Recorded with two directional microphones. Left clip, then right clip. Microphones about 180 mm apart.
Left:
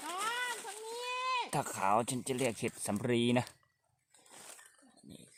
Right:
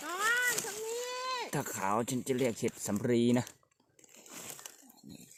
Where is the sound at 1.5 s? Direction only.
15° left (ahead or behind).